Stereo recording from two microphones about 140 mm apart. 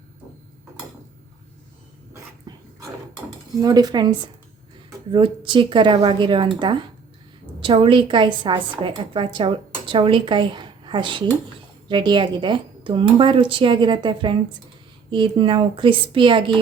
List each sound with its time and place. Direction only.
2.5 s dog: 30° right (ahead or behind)
3.6 s speech: 25° right (ahead or behind)
5.1 s speech: 35° right (ahead or behind)